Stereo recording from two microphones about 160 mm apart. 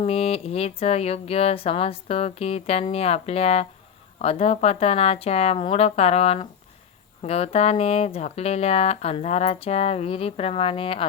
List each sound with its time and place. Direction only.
0.0 s speech: 40° left (ahead or behind)